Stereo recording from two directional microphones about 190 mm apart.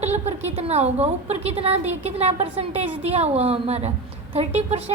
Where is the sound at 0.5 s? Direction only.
35° right (ahead or behind).